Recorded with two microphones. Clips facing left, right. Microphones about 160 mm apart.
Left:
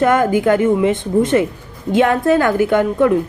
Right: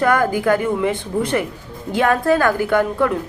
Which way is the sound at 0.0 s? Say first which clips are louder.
Left 3 dB; 20° left (ahead or behind).